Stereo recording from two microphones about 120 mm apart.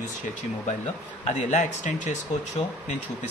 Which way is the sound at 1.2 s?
75° left (ahead or behind).